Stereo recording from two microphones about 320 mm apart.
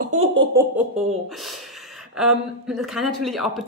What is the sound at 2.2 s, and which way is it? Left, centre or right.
Speech, centre.